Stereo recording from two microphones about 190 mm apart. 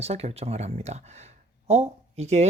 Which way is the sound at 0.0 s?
35° right (ahead or behind).